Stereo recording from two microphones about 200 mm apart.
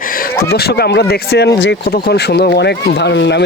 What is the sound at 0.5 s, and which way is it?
Speech, 55° left (ahead or behind).